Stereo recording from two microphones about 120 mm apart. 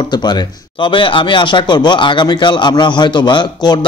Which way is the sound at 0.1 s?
35° left (ahead or behind).